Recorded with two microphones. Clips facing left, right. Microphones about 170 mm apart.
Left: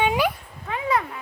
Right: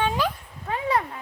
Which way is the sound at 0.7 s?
35° right (ahead or behind).